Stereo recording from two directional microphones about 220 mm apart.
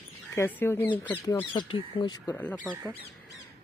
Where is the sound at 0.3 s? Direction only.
10° left (ahead or behind).